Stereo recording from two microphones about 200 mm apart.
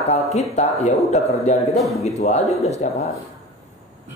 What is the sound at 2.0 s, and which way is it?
Speech, 35° left (ahead or behind).